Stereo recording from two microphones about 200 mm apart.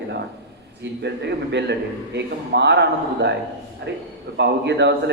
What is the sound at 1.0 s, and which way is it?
A man's voice, 60° right (ahead or behind).